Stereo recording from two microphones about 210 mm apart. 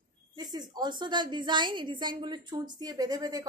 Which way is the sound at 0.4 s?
20° right (ahead or behind).